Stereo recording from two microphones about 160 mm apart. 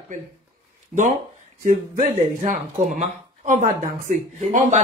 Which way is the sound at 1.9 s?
55° right (ahead or behind).